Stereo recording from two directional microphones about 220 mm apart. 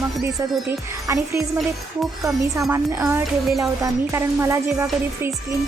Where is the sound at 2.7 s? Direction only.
10° right (ahead or behind).